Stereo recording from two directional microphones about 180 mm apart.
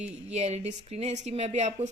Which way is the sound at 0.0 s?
35° right (ahead or behind).